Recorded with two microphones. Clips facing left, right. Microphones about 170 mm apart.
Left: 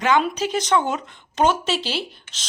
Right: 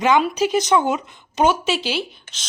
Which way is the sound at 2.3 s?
40° right (ahead or behind).